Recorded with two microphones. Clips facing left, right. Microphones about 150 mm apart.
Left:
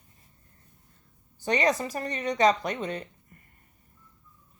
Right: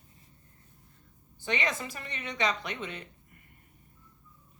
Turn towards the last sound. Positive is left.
turn(degrees=40)  # may be behind; listen again after turning